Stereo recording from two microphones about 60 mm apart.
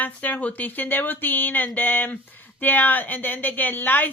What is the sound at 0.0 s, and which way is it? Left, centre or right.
A woman's voice, left.